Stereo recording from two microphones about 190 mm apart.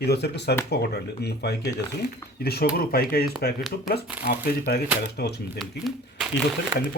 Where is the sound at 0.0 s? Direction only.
60° left (ahead or behind).